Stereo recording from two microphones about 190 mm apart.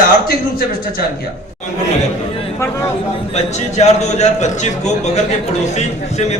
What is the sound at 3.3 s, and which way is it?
A man's voice, 35° left (ahead or behind).